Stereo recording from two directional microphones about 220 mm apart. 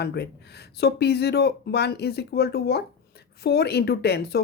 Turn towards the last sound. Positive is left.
turn(degrees=50)  # may be behind; listen again after turning